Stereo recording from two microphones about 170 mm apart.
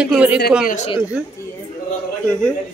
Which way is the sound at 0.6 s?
45° left (ahead or behind).